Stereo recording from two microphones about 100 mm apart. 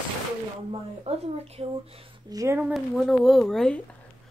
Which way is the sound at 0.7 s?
90° right.